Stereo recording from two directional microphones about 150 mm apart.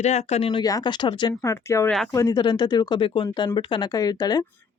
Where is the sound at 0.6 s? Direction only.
25° left (ahead or behind).